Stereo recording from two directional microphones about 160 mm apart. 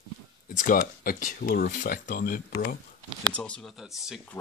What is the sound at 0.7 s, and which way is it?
Speech, 60° left (ahead or behind).